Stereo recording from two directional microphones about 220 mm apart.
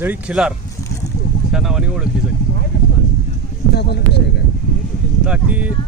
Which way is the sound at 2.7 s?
50° left (ahead or behind).